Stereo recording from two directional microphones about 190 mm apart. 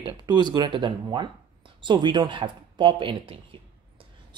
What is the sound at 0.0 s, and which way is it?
A woman's voice, 25° right (ahead or behind).